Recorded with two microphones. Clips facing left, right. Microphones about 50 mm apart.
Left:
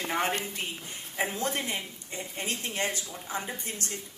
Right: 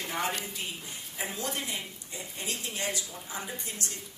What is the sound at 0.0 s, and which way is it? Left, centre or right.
A woman's voice, left.